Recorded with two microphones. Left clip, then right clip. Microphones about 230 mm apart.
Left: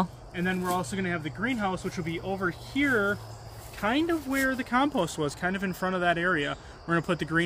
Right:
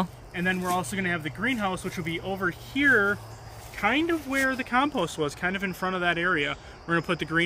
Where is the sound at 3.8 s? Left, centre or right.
Left.